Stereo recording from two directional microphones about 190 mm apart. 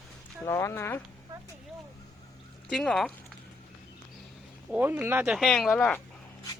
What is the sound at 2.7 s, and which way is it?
Speech, 5° left (ahead or behind).